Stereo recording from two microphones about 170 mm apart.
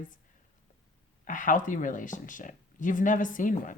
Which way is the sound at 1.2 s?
50° left (ahead or behind).